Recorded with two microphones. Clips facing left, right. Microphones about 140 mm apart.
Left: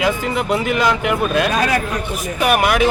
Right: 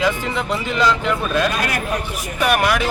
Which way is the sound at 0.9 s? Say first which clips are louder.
Left 2 dB; 60° left (ahead or behind).